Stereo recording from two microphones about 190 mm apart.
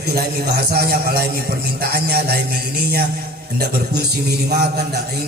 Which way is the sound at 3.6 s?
55° right (ahead or behind).